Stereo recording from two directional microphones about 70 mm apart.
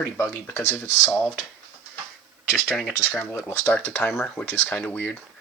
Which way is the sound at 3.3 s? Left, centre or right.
Left.